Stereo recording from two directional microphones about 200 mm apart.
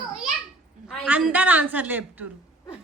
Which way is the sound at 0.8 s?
5° right (ahead or behind).